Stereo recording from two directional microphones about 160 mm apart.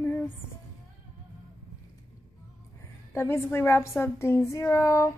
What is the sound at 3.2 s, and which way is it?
A woman's voice, 15° left (ahead or behind).